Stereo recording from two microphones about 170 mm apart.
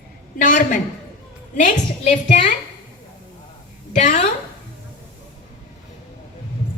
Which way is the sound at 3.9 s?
45° left (ahead or behind).